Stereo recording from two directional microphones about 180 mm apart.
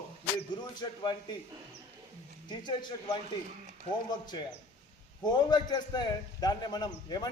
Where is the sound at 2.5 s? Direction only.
25° left (ahead or behind).